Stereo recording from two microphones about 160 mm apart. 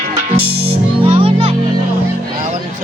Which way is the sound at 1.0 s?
35° right (ahead or behind).